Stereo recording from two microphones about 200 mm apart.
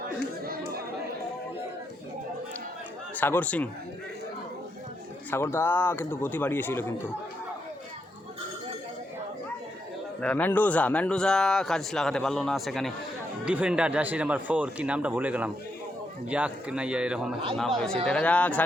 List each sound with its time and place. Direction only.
0.4 s chatter: 50° right (ahead or behind)
3.2 s speech: 10° left (ahead or behind)
5.3 s speech: 10° left (ahead or behind)
10.2 s a man's voice: 5° left (ahead or behind)